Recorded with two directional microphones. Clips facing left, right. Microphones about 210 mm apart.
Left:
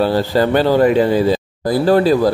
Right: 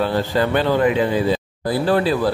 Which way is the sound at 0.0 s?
35° left (ahead or behind).